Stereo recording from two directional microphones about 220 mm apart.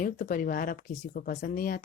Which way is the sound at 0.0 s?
40° left (ahead or behind).